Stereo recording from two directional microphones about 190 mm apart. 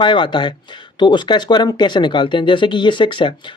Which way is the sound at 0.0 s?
25° left (ahead or behind).